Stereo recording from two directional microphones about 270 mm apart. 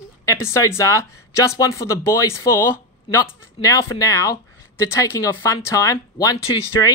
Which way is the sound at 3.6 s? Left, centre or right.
Centre.